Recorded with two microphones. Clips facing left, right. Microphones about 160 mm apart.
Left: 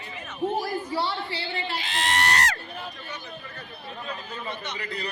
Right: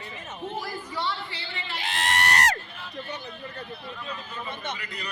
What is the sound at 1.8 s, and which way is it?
Speech, 55° right (ahead or behind).